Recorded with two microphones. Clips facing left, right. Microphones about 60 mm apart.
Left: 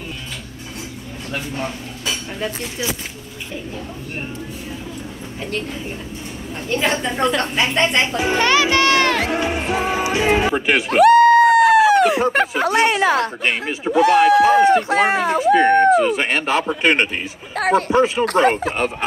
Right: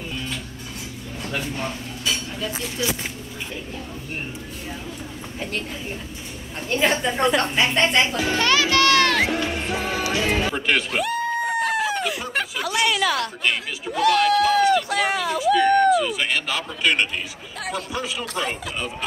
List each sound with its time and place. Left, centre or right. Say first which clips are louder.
6.7 s a woman's voice: left 1 dB; centre
8.2 s music: left 4 dB; left
9.3 s speech: left 4 dB; left
11.0 s a sound: left 14 dB; left
12.1 s speech: left 10 dB; left
17.6 s speech: left 13 dB; left
18.2 s speech: left 12 dB; left